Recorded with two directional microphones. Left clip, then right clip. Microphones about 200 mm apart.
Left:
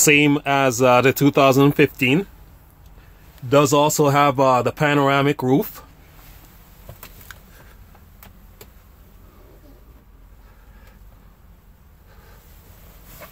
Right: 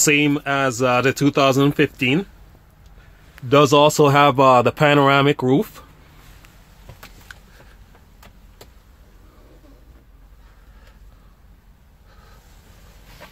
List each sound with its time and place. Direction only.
0.0 s speech: 15° left (ahead or behind)
3.4 s speech: 15° right (ahead or behind)
7.3 s a sound: 15° left (ahead or behind)